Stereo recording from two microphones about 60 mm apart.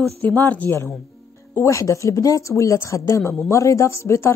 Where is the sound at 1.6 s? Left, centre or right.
Left.